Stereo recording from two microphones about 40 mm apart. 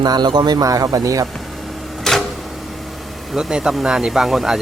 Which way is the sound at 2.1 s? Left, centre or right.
Centre.